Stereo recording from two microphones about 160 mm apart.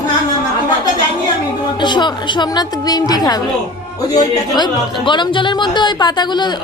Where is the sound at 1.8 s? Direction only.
30° left (ahead or behind).